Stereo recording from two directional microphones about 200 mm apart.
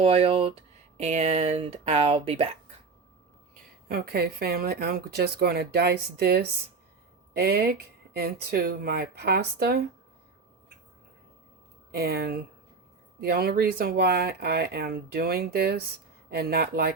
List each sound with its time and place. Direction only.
0.0 s speech: 30° right (ahead or behind)
3.8 s speech: 50° right (ahead or behind)
11.9 s speech: 50° right (ahead or behind)